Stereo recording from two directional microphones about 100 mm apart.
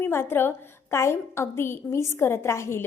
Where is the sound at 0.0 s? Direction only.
25° left (ahead or behind).